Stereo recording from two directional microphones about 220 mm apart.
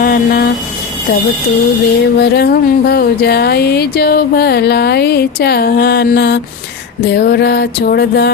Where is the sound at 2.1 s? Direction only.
45° left (ahead or behind).